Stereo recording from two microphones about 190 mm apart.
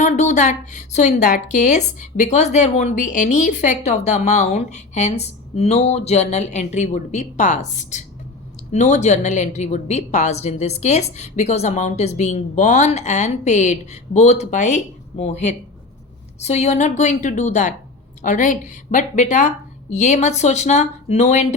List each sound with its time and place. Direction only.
0.0 s a woman's voice: 35° left (ahead or behind)